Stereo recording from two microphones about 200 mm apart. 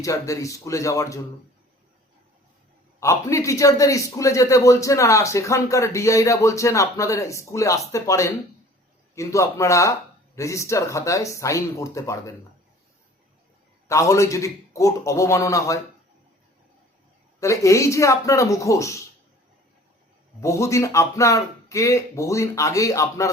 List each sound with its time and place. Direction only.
0.0 s a man's voice: 15° left (ahead or behind)
3.0 s a man's voice: 15° left (ahead or behind)
13.8 s a man's voice: 15° left (ahead or behind)
17.4 s a man's voice: 15° left (ahead or behind)
20.4 s a man's voice: 15° left (ahead or behind)